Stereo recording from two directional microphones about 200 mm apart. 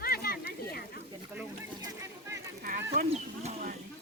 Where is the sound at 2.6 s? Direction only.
45° right (ahead or behind).